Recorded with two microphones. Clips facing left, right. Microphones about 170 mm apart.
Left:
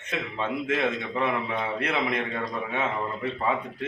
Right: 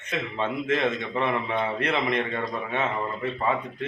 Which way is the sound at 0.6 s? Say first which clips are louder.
Right 2 dB; 10° left (ahead or behind).